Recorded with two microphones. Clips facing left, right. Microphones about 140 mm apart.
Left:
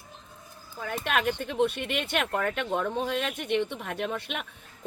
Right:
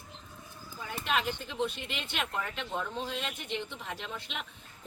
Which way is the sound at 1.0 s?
65° left (ahead or behind).